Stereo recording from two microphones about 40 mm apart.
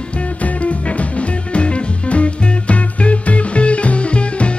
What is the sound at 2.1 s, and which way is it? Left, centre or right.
Music, left.